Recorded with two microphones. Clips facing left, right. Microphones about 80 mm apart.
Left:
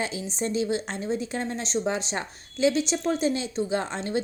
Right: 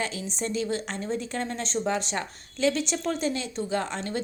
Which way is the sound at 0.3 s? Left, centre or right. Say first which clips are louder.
Left 3 dB; centre.